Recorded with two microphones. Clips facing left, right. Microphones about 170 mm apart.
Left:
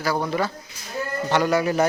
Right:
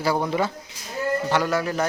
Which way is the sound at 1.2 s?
Centre (ahead or behind).